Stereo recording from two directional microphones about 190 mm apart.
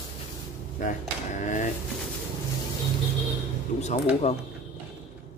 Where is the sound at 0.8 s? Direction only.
40° left (ahead or behind).